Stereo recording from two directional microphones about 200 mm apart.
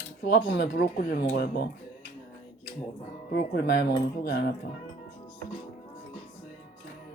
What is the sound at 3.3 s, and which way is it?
Speech, 55° left (ahead or behind).